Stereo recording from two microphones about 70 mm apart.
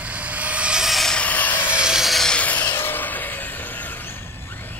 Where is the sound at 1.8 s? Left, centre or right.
Centre.